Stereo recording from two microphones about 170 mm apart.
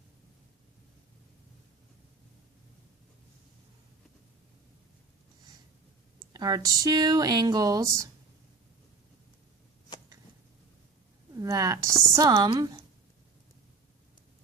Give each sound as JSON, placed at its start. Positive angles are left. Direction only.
{"t": 6.1, "sound": "speech", "side_deg": -25}
{"t": 11.3, "sound": "a woman's voice", "side_deg": -20}